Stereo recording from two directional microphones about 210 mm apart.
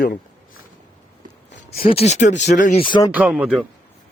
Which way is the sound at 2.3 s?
55° left (ahead or behind).